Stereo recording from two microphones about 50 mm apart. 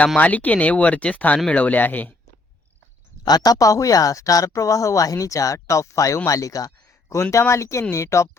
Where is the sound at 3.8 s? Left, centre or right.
Left.